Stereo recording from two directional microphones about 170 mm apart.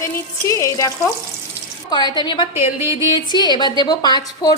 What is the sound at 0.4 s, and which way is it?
Speech, 20° left (ahead or behind).